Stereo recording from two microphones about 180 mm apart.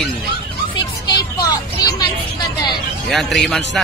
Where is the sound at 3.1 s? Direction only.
Centre (ahead or behind).